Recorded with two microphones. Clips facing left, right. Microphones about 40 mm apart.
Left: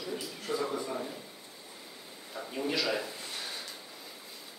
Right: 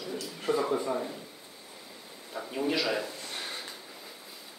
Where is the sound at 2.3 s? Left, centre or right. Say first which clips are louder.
Right 3 dB; centre.